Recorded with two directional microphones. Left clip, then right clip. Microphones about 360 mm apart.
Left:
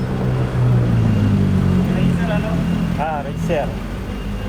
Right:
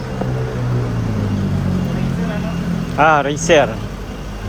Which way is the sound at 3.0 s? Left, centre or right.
Right.